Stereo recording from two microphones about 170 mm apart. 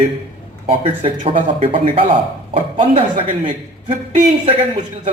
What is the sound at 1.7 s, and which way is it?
A man's voice, 35° right (ahead or behind).